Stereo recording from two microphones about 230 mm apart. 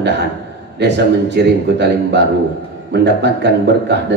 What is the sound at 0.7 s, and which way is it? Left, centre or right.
Speech, right.